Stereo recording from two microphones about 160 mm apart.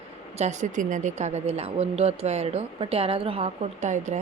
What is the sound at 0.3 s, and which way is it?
A woman's voice, 45° right (ahead or behind).